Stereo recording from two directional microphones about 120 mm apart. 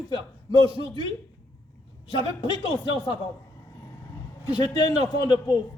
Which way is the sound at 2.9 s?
40° left (ahead or behind).